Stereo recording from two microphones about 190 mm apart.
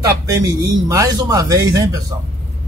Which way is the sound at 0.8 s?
20° right (ahead or behind).